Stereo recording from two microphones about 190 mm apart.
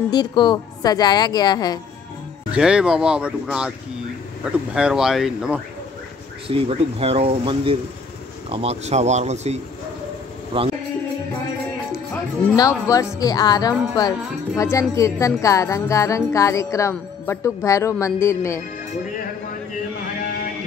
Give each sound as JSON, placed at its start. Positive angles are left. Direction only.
{"t": 0.1, "sound": "a woman's voice", "side_deg": 25}
{"t": 2.5, "sound": "speech", "side_deg": -5}
{"t": 6.4, "sound": "speech", "side_deg": -30}
{"t": 12.5, "sound": "music", "side_deg": 20}
{"t": 13.2, "sound": "a woman's voice", "side_deg": 20}
{"t": 14.6, "sound": "music", "side_deg": 15}